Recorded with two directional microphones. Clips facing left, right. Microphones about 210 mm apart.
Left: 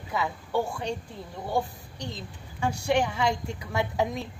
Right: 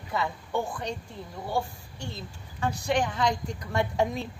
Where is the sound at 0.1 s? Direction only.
5° left (ahead or behind).